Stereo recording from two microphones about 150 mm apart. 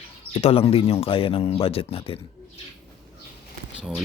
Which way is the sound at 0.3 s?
40° left (ahead or behind).